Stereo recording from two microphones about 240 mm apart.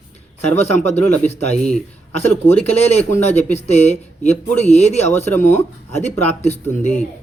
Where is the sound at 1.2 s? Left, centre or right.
Left.